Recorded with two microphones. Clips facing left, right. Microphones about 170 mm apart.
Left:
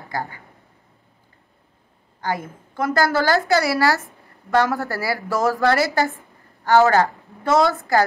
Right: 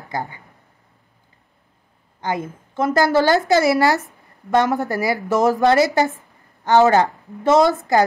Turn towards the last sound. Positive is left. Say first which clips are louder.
# right 3 dB
turn(degrees=-20)  # may be behind; listen again after turning